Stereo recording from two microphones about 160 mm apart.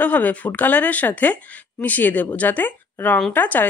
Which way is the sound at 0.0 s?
10° left (ahead or behind).